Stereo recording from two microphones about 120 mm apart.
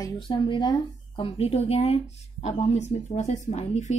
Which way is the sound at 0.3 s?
40° left (ahead or behind).